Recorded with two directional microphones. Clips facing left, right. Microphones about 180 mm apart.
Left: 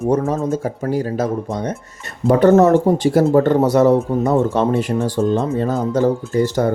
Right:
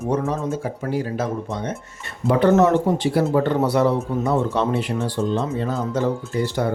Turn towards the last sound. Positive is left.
turn(degrees=45)  # may be behind; listen again after turning